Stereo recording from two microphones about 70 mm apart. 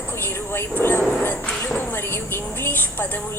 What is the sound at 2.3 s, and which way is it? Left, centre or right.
Speech, left.